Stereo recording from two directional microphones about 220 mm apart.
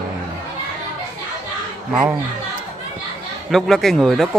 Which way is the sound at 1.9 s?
5° right (ahead or behind).